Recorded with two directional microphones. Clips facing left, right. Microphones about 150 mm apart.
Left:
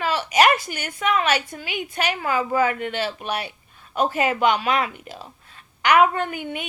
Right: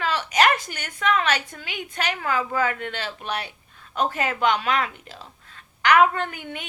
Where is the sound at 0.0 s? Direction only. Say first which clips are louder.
Left 2 dB; 5° left (ahead or behind).